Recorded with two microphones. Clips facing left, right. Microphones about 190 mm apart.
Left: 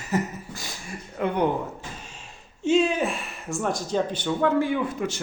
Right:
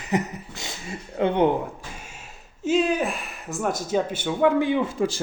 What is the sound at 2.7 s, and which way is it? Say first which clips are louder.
Speech: even; centre (ahead or behind).